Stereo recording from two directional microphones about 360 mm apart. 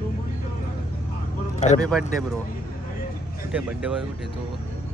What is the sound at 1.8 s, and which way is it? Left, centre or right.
Speech, centre.